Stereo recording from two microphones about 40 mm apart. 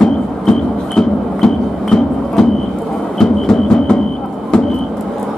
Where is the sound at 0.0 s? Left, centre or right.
Centre.